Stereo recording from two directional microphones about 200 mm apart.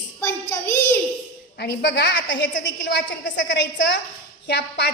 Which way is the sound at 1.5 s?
55° left (ahead or behind).